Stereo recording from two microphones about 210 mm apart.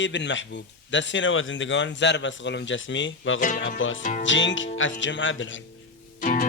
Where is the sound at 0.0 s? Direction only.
60° left (ahead or behind).